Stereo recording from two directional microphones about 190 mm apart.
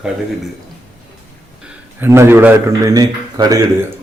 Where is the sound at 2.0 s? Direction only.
15° right (ahead or behind).